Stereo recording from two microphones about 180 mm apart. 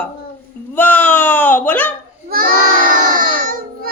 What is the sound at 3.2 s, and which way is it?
Baby cry, 50° right (ahead or behind).